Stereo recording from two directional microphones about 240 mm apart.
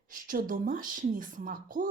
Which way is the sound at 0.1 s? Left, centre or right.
Right.